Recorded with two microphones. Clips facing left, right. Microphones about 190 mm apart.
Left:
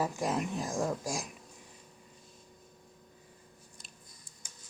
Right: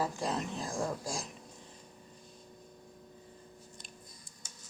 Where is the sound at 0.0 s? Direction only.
15° left (ahead or behind).